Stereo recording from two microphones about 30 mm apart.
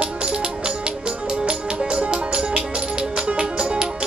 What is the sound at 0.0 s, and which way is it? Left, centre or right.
Music, right.